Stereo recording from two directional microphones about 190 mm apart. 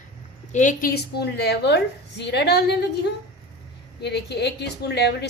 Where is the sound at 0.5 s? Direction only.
40° left (ahead or behind).